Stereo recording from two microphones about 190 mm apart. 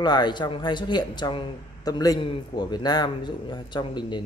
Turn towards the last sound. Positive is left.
turn(degrees=25)  # may be behind; listen again after turning